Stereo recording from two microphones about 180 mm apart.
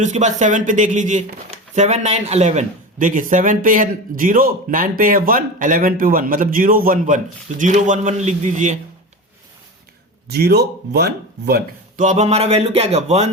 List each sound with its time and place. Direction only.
0.0 s a man's voice: 40° right (ahead or behind)
10.2 s speech: 65° right (ahead or behind)
12.0 s a sound: 40° right (ahead or behind)